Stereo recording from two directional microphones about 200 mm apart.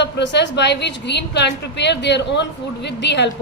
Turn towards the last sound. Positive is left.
turn(degrees=60)  # may be behind; listen again after turning